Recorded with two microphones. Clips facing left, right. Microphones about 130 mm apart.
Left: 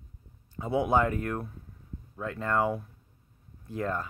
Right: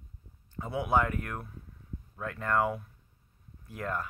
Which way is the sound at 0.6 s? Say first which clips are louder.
Left 3 dB; 20° left (ahead or behind).